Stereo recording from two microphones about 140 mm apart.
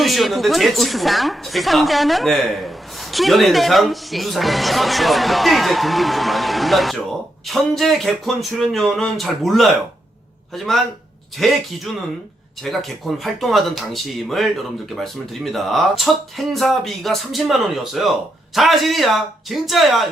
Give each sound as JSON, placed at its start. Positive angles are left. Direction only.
{"t": 0.0, "sound": "a woman's voice", "side_deg": 0}
{"t": 11.3, "sound": "a woman's voice", "side_deg": 0}